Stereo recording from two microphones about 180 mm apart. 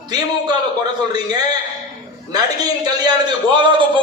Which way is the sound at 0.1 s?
25° right (ahead or behind).